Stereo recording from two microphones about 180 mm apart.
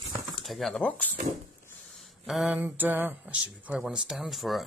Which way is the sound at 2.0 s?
Centre (ahead or behind).